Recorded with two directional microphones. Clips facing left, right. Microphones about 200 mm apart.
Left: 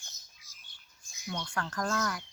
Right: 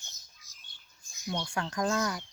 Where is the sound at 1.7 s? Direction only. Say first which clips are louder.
Right 3 dB; 15° right (ahead or behind).